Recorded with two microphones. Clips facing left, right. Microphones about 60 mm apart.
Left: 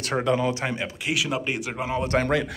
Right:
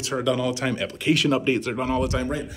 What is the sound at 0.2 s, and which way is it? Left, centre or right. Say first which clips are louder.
Speech: even; left.